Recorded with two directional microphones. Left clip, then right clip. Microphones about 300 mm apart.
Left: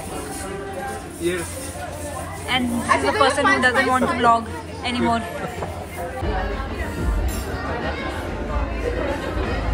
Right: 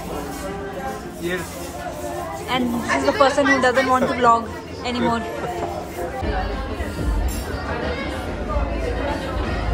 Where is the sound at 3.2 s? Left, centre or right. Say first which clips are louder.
Even; centre.